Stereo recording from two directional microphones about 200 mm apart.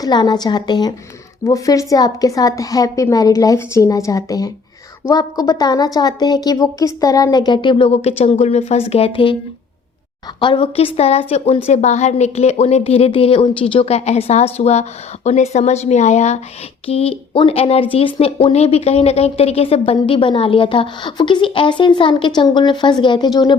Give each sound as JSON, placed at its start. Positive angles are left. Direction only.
{"t": 0.0, "sound": "a woman's voice", "side_deg": 20}
{"t": 10.4, "sound": "a woman's voice", "side_deg": 25}